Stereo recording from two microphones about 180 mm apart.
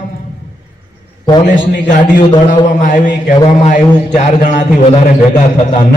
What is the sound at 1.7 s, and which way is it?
A man's voice, 50° left (ahead or behind).